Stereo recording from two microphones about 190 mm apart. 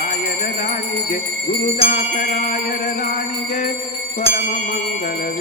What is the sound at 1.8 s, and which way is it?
Music, 45° left (ahead or behind).